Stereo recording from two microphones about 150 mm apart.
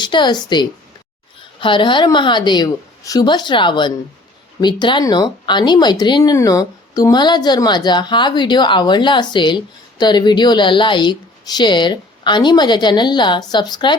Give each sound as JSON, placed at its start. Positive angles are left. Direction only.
{"t": 0.0, "sound": "a woman's voice", "side_deg": 30}